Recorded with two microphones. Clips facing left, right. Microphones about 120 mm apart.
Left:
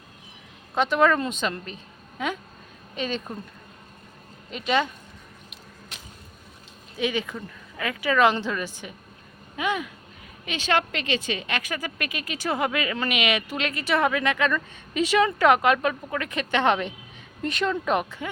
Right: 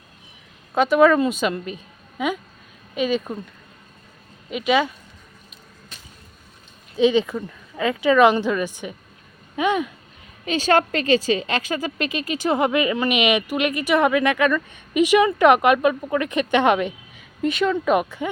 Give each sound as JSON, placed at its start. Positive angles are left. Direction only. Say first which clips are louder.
{"t": 0.8, "sound": "a woman's voice", "louder": "right 6 dB", "side_deg": -10}
{"t": 4.5, "sound": "a woman's voice", "louder": "right 4 dB", "side_deg": -5}
{"t": 6.9, "sound": "a woman's voice", "louder": "right 9 dB", "side_deg": -25}
{"t": 10.4, "sound": "a woman's voice", "louder": "right 6 dB", "side_deg": -40}